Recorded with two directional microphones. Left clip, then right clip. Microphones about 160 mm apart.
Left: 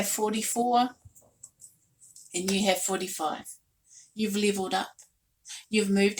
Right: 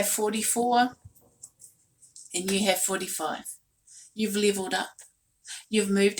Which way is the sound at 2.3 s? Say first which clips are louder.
Right 1 dB; 20° right (ahead or behind).